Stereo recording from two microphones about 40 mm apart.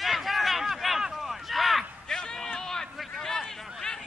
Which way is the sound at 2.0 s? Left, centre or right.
Centre.